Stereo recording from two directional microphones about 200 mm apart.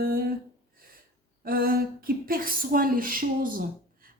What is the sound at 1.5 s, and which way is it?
A woman's voice, 45° right (ahead or behind).